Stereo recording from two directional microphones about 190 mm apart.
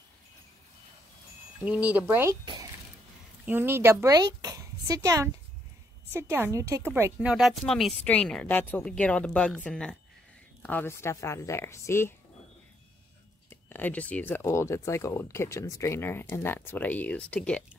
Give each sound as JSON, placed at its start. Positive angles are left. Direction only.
{"t": 1.6, "sound": "speech", "side_deg": -5}
{"t": 3.4, "sound": "speech", "side_deg": -10}
{"t": 13.5, "sound": "speech", "side_deg": 10}